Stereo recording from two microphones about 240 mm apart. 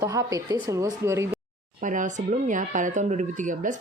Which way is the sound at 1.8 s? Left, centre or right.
Right.